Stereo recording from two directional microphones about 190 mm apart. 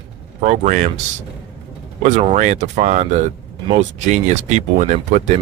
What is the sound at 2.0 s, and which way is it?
Speech, 40° right (ahead or behind).